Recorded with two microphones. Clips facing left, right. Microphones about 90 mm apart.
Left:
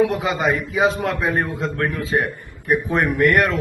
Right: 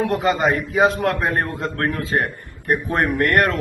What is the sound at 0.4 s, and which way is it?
A man's voice, 45° right (ahead or behind).